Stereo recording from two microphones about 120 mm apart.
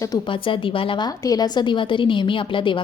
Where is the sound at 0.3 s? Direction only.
45° left (ahead or behind).